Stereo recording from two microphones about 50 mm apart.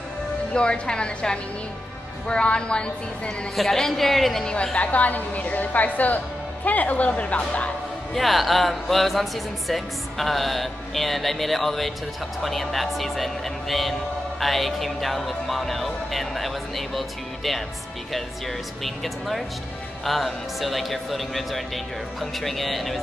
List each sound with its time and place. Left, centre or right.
0.6 s a woman's voice: centre
3.5 s speech: centre
4.7 s a woman's voice: left
8.1 s speech: centre
20.1 s speech: centre